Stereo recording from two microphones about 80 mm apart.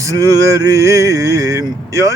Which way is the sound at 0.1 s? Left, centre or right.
Right.